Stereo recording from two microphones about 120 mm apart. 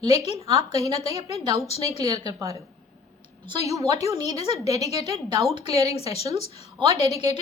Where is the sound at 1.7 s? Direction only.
60° left (ahead or behind).